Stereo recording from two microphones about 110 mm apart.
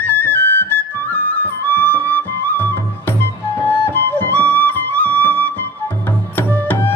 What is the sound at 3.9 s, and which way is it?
Music, 15° left (ahead or behind).